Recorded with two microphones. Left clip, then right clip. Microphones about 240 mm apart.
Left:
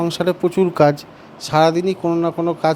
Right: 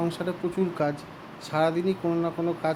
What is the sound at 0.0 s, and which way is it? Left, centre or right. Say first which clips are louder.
Speech: left 11 dB; left.